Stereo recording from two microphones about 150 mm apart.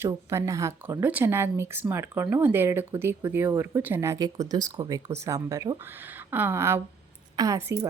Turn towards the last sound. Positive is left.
turn(degrees=-20)  # may be behind; listen again after turning